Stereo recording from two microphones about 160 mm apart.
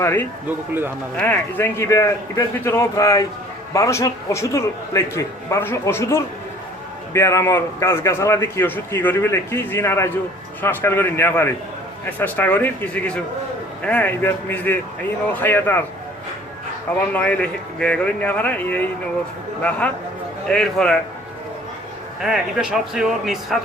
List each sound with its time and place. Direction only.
0.0 s a man's voice: 15° left (ahead or behind)
17.1 s a man's voice: 10° left (ahead or behind)
20.5 s speech: 5° left (ahead or behind)
22.2 s speech: centre (ahead or behind)